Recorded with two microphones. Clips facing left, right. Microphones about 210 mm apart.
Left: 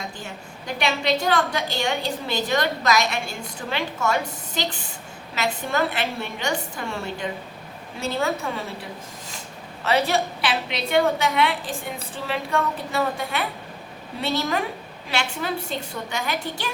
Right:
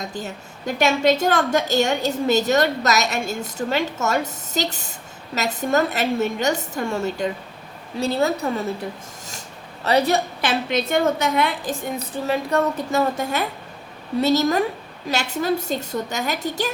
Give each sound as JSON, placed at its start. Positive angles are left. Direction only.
{"t": 0.0, "sound": "a woman's voice", "side_deg": -40}
{"t": 9.8, "sound": "a woman's voice", "side_deg": -40}